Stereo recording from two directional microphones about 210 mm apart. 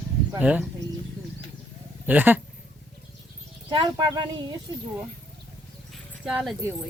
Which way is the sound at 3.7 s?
20° right (ahead or behind).